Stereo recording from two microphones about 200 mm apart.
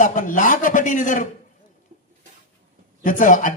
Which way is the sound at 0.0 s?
40° left (ahead or behind).